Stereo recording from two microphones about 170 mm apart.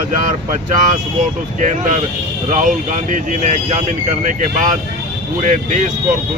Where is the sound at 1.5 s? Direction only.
45° right (ahead or behind).